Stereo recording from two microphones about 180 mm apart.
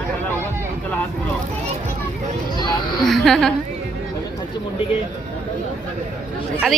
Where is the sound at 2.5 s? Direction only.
25° left (ahead or behind).